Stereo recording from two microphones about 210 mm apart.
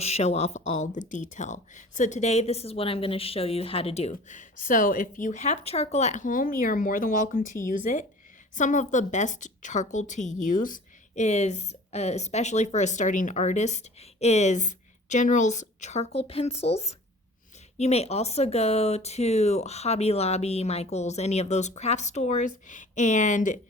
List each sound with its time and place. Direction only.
0.0 s a woman's voice: 30° left (ahead or behind)